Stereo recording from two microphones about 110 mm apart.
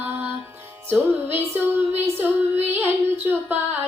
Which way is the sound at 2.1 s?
20° right (ahead or behind).